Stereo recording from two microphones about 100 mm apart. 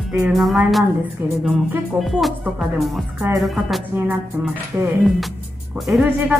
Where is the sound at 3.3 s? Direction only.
Centre (ahead or behind).